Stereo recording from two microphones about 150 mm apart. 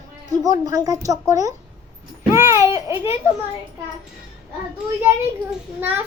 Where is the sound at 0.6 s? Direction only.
25° right (ahead or behind).